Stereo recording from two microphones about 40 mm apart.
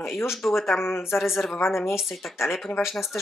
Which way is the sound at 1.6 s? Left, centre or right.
Left.